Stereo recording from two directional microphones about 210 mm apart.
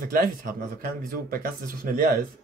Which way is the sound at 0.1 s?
40° right (ahead or behind).